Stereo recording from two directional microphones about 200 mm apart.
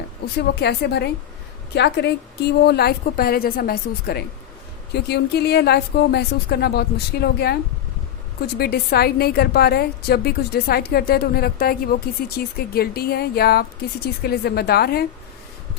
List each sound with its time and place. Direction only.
0.3 s a woman's voice: 55° left (ahead or behind)